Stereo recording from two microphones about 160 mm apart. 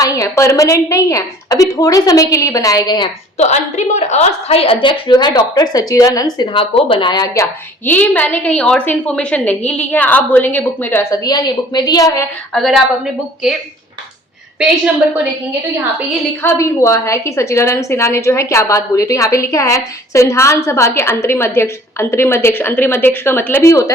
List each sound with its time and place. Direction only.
0.0 s a woman's voice: 20° left (ahead or behind)
3.3 s a woman's voice: 45° left (ahead or behind); by 6.2 s 20° left (ahead or behind)
6.4 s a woman's voice: 35° left (ahead or behind)
7.9 s a woman's voice: 10° left (ahead or behind)
11.1 s a woman's voice: 25° left (ahead or behind)
12.5 s a woman's voice: centre (ahead or behind)
16.4 s a woman's voice: 15° left (ahead or behind)